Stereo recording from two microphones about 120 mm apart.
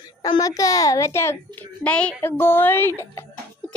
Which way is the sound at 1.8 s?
10° left (ahead or behind).